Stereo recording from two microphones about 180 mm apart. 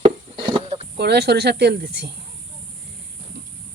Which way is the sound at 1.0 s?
65° right (ahead or behind).